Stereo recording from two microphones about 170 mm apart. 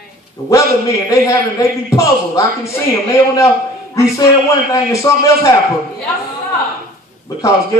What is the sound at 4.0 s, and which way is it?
A man's voice, 20° left (ahead or behind).